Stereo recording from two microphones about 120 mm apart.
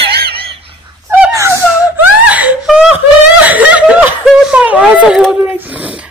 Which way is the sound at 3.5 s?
10° right (ahead or behind).